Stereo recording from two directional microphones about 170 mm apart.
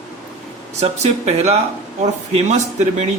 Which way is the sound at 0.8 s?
40° right (ahead or behind).